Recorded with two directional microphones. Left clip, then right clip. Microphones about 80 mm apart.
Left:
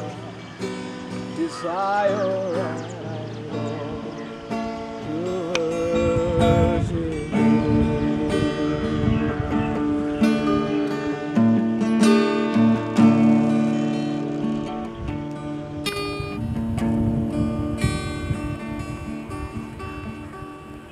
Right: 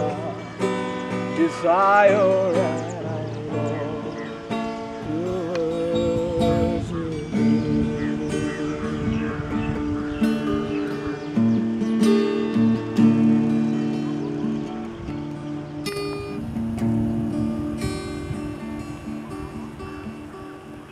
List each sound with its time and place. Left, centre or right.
0.6 s music: right
4.5 s music: centre
7.3 s music: left
10.2 s music: left
15.8 s music: left
17.4 s music: left